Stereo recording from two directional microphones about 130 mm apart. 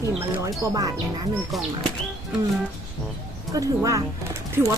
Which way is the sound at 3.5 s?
25° right (ahead or behind).